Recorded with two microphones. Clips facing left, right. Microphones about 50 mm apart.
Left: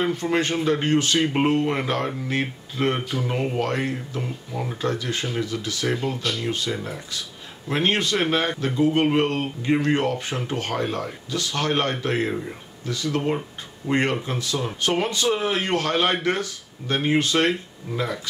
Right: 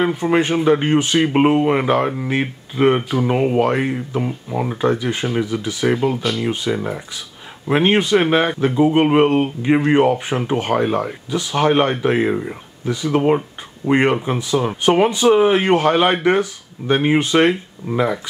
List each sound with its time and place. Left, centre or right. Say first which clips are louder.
0.0 s speech: right 6 dB; centre